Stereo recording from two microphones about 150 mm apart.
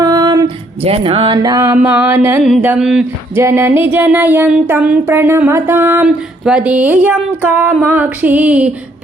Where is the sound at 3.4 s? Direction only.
15° right (ahead or behind).